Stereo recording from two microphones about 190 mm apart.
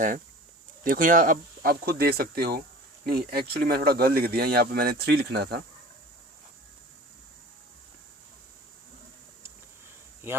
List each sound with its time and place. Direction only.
0.9 s speech: 45° right (ahead or behind); by 5.6 s 60° right (ahead or behind)